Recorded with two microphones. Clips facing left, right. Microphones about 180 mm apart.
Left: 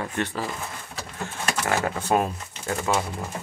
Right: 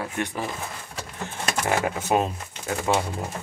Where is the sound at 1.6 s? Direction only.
10° right (ahead or behind).